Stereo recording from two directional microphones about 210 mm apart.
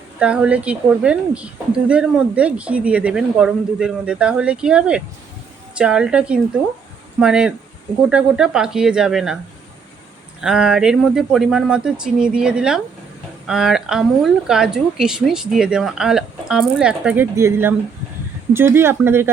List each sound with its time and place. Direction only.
0.2 s a woman's voice: 5° right (ahead or behind)
10.4 s a woman's voice: 5° right (ahead or behind)